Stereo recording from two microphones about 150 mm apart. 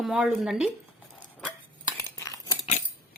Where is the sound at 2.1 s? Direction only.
20° left (ahead or behind).